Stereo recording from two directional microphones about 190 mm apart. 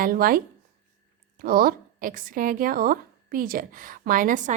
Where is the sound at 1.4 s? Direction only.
50° right (ahead or behind).